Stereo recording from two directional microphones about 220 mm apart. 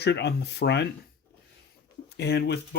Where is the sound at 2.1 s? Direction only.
50° left (ahead or behind).